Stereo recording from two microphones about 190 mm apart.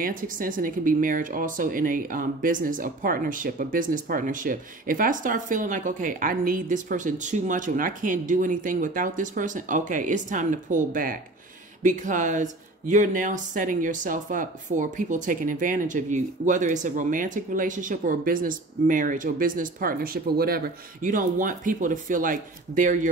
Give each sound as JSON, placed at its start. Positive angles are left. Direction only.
{"t": 0.0, "sound": "a woman's voice", "side_deg": -45}